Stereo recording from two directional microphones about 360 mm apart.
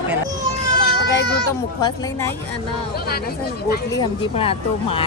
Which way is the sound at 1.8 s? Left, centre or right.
Centre.